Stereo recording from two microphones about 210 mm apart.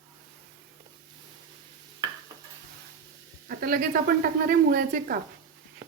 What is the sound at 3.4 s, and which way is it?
Speech, 45° right (ahead or behind).